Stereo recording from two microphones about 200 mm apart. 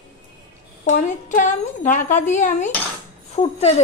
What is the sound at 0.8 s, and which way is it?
A woman's voice, 40° left (ahead or behind).